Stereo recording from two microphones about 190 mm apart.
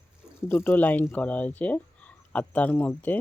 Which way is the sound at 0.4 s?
10° left (ahead or behind).